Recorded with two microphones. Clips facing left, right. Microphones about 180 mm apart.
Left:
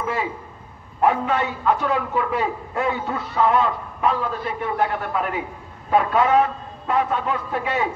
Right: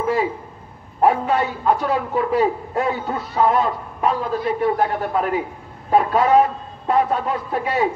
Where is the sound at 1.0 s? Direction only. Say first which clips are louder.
Right 2 dB; 35° right (ahead or behind).